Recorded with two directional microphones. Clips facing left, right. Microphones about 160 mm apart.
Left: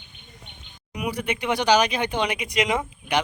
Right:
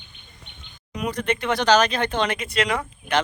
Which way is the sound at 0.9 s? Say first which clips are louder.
Right 2 dB; 10° left (ahead or behind).